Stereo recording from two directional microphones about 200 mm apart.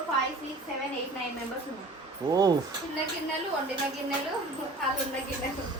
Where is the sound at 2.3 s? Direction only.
20° right (ahead or behind).